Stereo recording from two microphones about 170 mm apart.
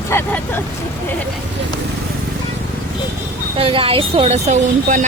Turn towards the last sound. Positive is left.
turn(degrees=-45)  # may be behind; listen again after turning